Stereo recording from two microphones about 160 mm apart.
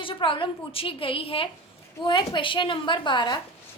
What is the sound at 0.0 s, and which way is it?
A woman's voice, 30° left (ahead or behind).